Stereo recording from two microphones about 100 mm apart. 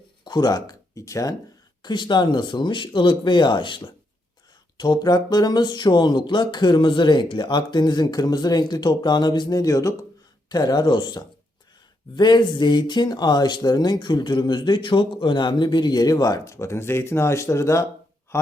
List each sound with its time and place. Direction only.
0.3 s speech: 40° left (ahead or behind)
1.8 s speech: 50° left (ahead or behind); by 17.8 s 30° left (ahead or behind)